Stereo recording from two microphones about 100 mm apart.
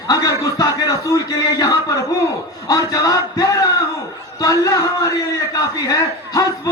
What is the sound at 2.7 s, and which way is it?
A man's voice, 35° left (ahead or behind).